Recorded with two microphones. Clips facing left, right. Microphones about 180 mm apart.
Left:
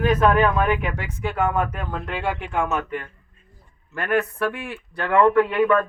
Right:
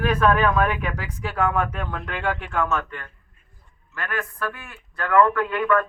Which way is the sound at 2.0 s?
10° left (ahead or behind).